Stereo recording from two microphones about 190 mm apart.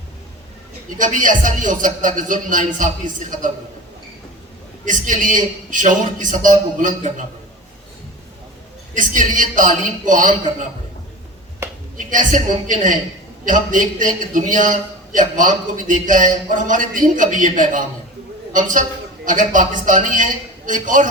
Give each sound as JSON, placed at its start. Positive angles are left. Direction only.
{"t": 0.9, "sound": "a man's voice", "side_deg": -45}
{"t": 4.9, "sound": "a man's voice", "side_deg": -45}
{"t": 9.0, "sound": "a man's voice", "side_deg": -45}
{"t": 11.9, "sound": "a man's voice", "side_deg": -45}